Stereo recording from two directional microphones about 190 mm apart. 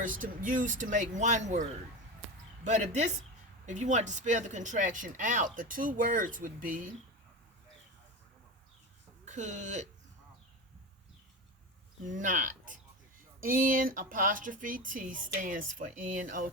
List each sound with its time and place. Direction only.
0.0 s speech: 45° right (ahead or behind)
9.2 s speech: 40° right (ahead or behind)
12.0 s speech: 40° right (ahead or behind)